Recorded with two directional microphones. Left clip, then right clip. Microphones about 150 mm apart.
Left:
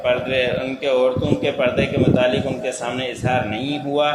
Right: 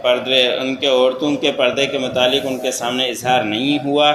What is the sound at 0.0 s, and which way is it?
A man's voice, 40° right (ahead or behind).